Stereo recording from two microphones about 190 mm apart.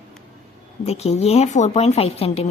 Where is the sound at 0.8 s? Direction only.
35° left (ahead or behind).